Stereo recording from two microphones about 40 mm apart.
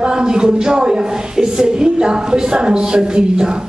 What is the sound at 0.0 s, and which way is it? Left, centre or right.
A woman's voice, right.